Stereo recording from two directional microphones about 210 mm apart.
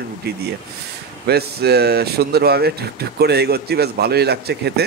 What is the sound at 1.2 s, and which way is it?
Speech, 50° right (ahead or behind).